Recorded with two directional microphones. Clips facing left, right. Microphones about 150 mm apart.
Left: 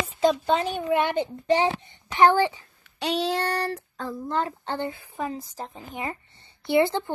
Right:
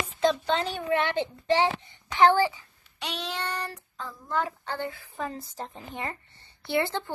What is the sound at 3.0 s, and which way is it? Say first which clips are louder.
Child singing: left 9 dB; 30° left (ahead or behind).